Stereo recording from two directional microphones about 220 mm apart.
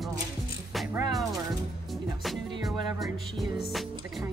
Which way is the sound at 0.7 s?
5° right (ahead or behind).